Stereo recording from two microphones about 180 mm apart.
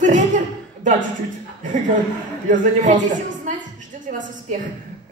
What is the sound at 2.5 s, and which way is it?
Speech, 45° right (ahead or behind).